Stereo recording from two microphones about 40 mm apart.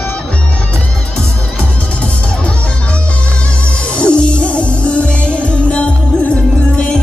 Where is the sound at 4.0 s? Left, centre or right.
Left.